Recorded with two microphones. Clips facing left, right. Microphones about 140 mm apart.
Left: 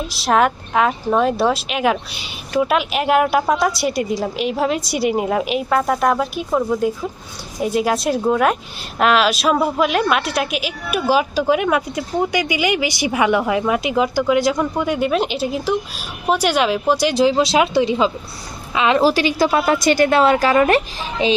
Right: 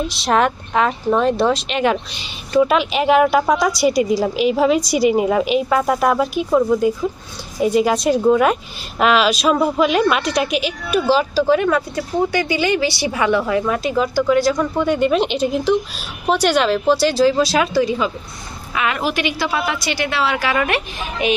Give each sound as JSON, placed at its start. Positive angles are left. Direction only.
{"t": 0.1, "sound": "a woman's voice", "side_deg": 0}